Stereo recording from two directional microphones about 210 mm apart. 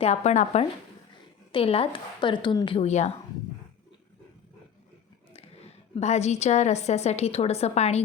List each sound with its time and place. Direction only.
0.0 s a woman's voice: 30° left (ahead or behind)
5.3 s a woman's voice: 30° left (ahead or behind)